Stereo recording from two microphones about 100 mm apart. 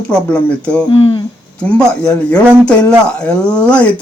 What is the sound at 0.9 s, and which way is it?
Speech, 70° left (ahead or behind).